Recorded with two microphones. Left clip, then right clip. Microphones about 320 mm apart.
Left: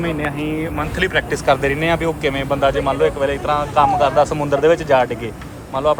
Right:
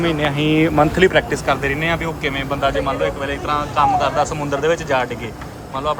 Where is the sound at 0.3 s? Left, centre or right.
Right.